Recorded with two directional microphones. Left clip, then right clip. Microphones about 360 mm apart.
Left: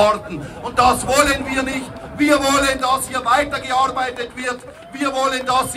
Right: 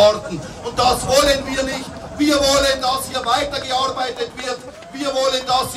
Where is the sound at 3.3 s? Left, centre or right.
Centre.